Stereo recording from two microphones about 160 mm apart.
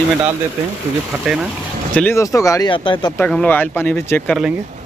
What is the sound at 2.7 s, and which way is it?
Speech, 30° left (ahead or behind).